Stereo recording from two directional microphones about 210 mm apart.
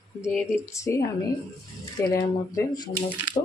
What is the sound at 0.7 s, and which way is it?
Speech, 15° left (ahead or behind).